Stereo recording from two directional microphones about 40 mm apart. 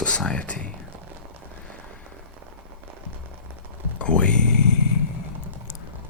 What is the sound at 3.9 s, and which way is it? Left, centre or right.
Speech, left.